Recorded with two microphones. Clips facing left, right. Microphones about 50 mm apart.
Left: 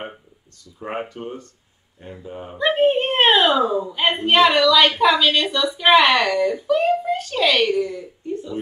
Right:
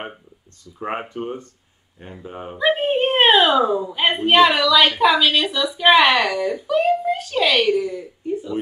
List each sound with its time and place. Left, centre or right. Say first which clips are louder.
0.7 s speech: right 2 dB; right
2.5 s a woman's voice: left 2 dB; centre